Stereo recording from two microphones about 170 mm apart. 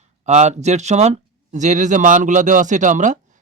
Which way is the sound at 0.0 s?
40° right (ahead or behind).